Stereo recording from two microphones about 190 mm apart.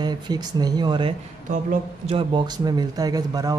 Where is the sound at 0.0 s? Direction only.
20° right (ahead or behind).